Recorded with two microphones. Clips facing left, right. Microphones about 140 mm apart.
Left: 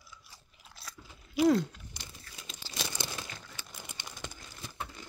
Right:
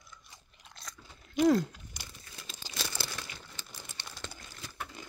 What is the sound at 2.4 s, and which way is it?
Crumpling, 15° left (ahead or behind).